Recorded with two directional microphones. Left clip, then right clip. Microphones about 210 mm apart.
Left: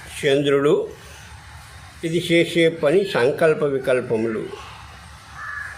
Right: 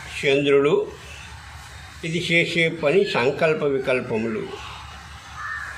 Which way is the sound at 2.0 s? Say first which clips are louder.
Left 2 dB; 30° left (ahead or behind).